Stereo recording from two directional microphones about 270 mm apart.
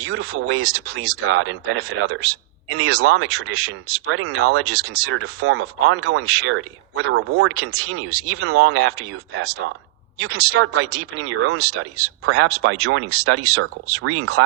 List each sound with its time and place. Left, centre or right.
0.0 s speech: right